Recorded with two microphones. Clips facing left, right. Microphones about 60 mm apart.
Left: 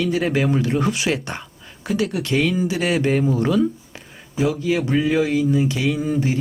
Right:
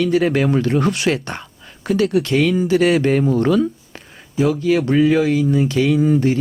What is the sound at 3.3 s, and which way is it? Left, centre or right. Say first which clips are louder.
Speech: right 3 dB; right.